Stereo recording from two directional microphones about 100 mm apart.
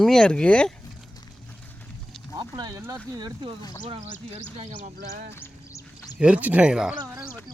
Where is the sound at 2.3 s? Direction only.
40° right (ahead or behind).